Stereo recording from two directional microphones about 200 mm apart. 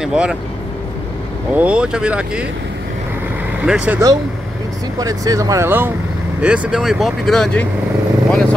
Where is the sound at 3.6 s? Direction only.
5° right (ahead or behind).